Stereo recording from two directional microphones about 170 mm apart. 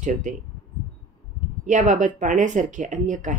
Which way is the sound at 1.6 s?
45° right (ahead or behind).